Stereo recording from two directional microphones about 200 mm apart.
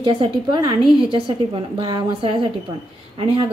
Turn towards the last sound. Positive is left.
turn(degrees=-25)  # may be behind; listen again after turning